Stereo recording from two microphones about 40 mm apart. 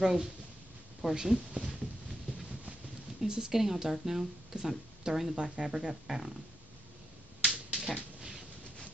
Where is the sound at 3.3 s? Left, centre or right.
Centre.